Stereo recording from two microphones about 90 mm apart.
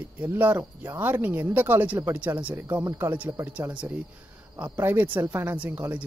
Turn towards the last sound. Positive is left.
turn(degrees=-20)  # may be behind; listen again after turning